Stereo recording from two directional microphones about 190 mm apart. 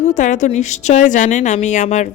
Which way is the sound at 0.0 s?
40° left (ahead or behind).